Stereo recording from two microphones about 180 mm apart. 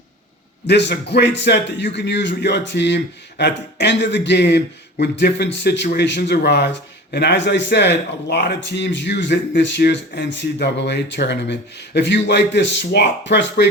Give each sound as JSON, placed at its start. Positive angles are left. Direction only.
{"t": 0.7, "sound": "speech", "side_deg": 70}